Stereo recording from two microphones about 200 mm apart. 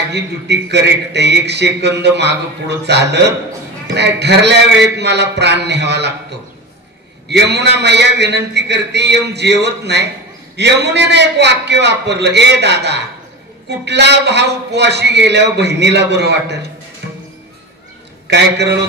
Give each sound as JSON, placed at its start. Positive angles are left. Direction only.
{"t": 0.1, "sound": "a man's voice", "side_deg": -55}
{"t": 7.2, "sound": "a man's voice", "side_deg": -55}
{"t": 18.2, "sound": "a man's voice", "side_deg": -60}